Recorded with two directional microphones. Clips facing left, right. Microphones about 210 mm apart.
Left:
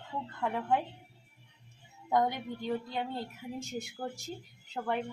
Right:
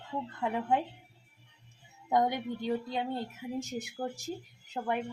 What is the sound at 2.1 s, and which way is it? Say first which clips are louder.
A woman's voice: right 1 dB; 15° right (ahead or behind).